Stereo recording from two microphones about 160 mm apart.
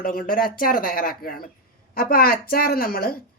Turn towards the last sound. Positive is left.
turn(degrees=65)  # may be behind; listen again after turning